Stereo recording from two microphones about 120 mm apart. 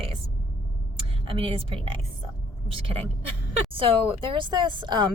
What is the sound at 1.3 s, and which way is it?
Speech, 50° right (ahead or behind).